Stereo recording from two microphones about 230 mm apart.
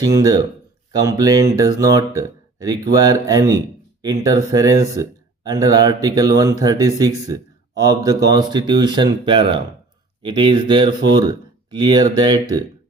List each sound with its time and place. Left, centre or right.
0.0 s speech: centre